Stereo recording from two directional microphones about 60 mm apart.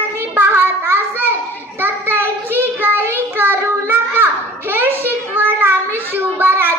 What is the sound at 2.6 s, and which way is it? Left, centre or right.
Child singing, right.